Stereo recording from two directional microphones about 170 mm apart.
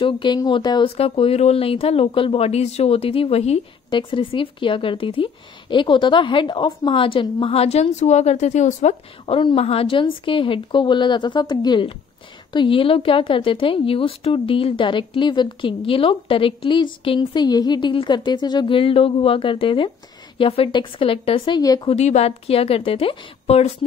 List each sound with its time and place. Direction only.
0.0 s speech: 25° left (ahead or behind)
21.8 s speech: 40° left (ahead or behind)